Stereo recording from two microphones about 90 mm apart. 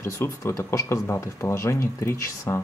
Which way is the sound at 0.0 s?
30° left (ahead or behind).